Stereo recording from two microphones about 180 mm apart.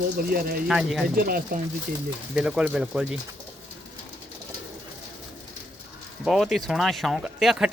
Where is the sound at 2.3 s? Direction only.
5° right (ahead or behind).